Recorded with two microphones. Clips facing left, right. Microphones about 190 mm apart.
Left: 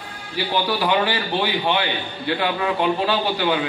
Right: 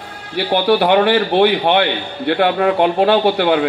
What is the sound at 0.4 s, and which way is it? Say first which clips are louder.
A man's voice: right 8 dB; 65° right (ahead or behind).